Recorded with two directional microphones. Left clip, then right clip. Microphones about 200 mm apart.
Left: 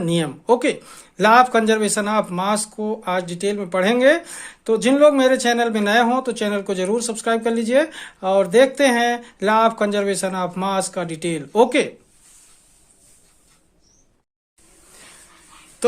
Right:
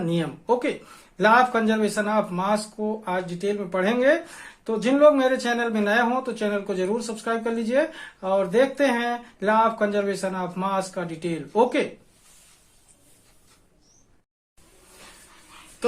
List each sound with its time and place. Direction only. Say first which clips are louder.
0.0 s speech: left 5 dB; 40° left (ahead or behind)